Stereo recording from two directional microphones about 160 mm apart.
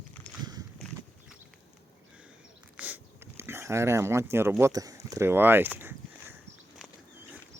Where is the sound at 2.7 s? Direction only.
10° right (ahead or behind).